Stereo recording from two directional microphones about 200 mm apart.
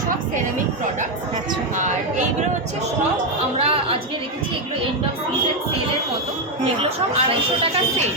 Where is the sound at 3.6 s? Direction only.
30° right (ahead or behind).